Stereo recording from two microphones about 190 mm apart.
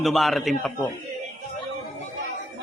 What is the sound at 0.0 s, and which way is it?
Speech, centre (ahead or behind).